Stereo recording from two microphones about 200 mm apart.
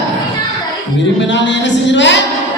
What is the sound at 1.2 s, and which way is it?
Speech, 65° left (ahead or behind).